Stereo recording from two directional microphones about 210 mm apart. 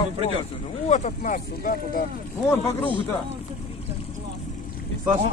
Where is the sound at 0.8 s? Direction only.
35° left (ahead or behind).